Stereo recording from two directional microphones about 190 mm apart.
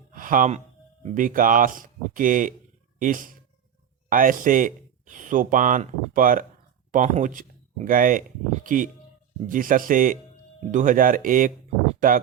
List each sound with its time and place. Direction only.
0.1 s music: 45° right (ahead or behind)
1.0 s speech: 45° right (ahead or behind)